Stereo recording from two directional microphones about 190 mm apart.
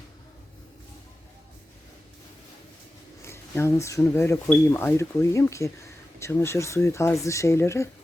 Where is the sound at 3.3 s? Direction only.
15° left (ahead or behind).